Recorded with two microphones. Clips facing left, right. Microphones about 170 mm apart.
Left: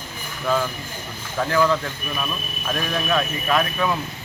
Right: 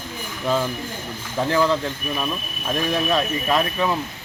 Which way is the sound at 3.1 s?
30° right (ahead or behind).